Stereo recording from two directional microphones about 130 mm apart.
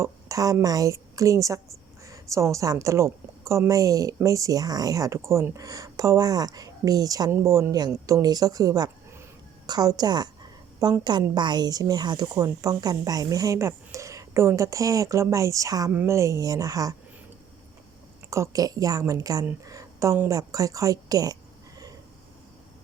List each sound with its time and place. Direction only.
0.0 s a sound: 25° right (ahead or behind)
0.6 s a woman's voice: 25° right (ahead or behind)
18.3 s a woman's voice: 25° right (ahead or behind)